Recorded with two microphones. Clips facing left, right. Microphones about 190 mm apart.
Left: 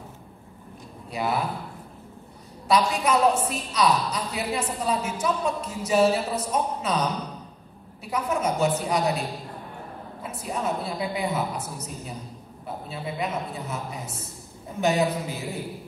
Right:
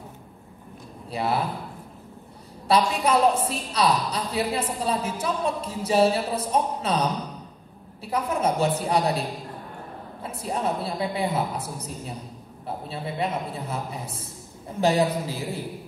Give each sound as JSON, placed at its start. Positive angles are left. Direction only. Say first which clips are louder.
{"t": 1.1, "sound": "a man's voice", "louder": "right 1 dB", "side_deg": -30}
{"t": 2.7, "sound": "a woman's voice", "louder": "right 1 dB", "side_deg": -30}
{"t": 10.2, "sound": "a woman's voice", "louder": "right 2 dB", "side_deg": -30}